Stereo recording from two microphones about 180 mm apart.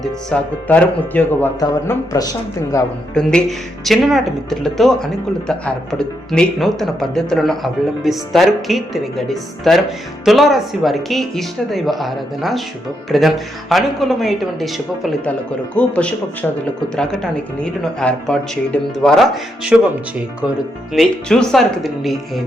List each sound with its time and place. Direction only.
0.0 s speech: 5° left (ahead or behind)
3.2 s speech: 5° left (ahead or behind)
17.6 s speech: 5° left (ahead or behind)
20.9 s speech: centre (ahead or behind)